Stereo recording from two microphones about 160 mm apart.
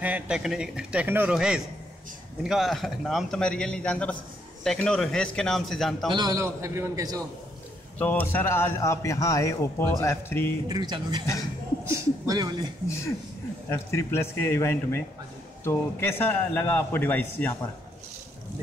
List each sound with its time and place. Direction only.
0.0 s a man's voice: 10° right (ahead or behind)
6.1 s a man's voice: 20° right (ahead or behind)
8.0 s a man's voice: 10° left (ahead or behind)
10.7 s a man's voice: 25° right (ahead or behind)
13.7 s a man's voice: 15° left (ahead or behind)